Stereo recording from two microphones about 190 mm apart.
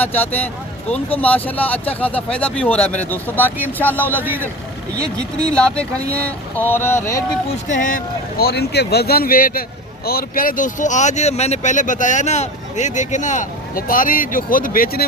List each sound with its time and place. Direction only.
0.0 s speech: 10° left (ahead or behind)
5.4 s speech: 5° left (ahead or behind)
7.7 s speech: 45° left (ahead or behind)